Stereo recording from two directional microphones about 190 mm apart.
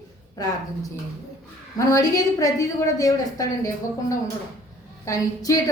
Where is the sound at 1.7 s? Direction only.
15° left (ahead or behind).